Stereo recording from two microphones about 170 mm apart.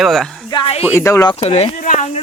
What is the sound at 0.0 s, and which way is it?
Speech, centre (ahead or behind).